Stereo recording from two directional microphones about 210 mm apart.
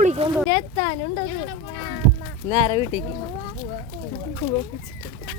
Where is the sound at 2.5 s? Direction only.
25° right (ahead or behind).